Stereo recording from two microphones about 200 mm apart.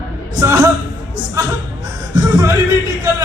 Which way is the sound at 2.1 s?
15° right (ahead or behind).